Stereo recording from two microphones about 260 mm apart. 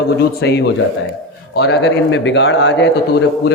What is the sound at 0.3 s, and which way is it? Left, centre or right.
A man's voice, left.